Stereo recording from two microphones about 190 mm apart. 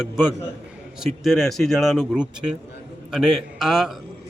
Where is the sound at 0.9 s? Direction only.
Centre (ahead or behind).